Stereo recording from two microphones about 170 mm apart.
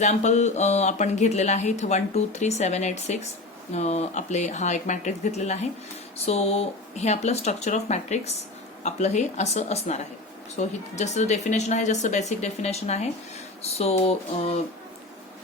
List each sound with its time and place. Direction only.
0.0 s speech: 45° left (ahead or behind)